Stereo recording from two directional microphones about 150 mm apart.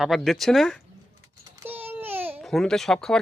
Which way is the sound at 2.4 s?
Centre (ahead or behind).